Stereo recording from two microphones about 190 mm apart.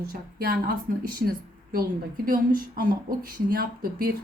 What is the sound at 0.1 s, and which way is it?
A woman's voice, 50° right (ahead or behind).